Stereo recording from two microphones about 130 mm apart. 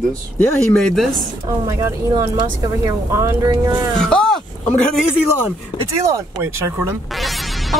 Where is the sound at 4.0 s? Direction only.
5° left (ahead or behind).